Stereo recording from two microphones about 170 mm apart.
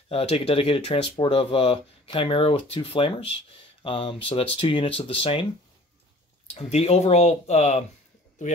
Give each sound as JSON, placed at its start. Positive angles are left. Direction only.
{"t": 0.1, "sound": "speech", "side_deg": 35}
{"t": 6.5, "sound": "speech", "side_deg": 35}